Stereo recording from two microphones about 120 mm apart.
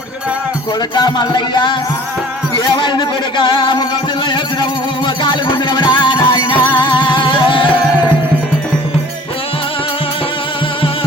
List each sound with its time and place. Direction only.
0.9 s music: 35° left (ahead or behind)
2.7 s music: 40° left (ahead or behind)